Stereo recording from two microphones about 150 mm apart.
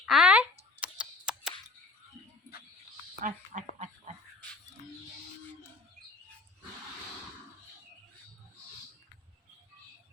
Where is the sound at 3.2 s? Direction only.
55° right (ahead or behind).